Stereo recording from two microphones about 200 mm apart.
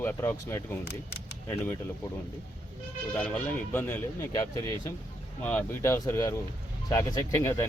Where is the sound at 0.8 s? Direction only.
55° left (ahead or behind).